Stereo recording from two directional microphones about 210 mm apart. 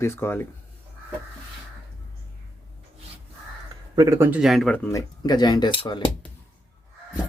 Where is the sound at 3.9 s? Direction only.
15° right (ahead or behind).